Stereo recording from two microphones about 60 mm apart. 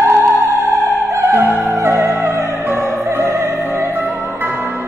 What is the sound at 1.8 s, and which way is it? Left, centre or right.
Music, right.